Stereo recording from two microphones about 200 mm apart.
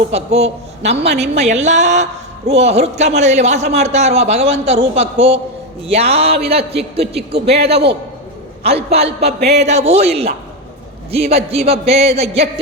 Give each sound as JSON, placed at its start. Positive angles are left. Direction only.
{"t": 0.1, "sound": "a man's voice", "side_deg": -30}
{"t": 7.3, "sound": "a man's voice", "side_deg": -55}
{"t": 8.6, "sound": "a man's voice", "side_deg": -30}
{"t": 9.2, "sound": "speech", "side_deg": -55}
{"t": 9.6, "sound": "a man's voice", "side_deg": -35}